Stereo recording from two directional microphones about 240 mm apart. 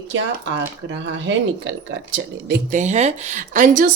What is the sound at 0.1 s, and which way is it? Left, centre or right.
Speech, right.